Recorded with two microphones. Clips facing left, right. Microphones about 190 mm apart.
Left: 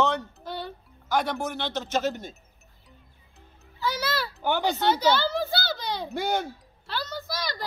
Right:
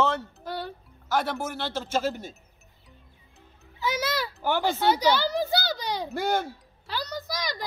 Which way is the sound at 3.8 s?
20° right (ahead or behind).